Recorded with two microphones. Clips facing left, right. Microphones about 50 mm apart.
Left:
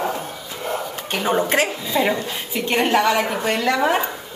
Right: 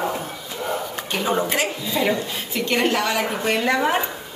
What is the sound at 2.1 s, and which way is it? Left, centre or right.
Speech, centre.